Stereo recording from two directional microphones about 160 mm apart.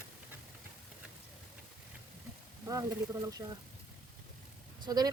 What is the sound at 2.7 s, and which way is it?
Speech, 20° right (ahead or behind).